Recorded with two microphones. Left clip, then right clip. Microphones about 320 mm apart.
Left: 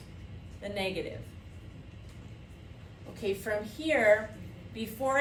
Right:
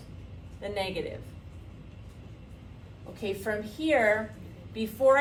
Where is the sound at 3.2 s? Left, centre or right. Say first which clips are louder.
Even; centre.